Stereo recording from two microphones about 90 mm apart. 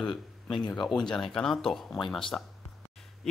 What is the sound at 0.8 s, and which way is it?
Speech, 5° left (ahead or behind).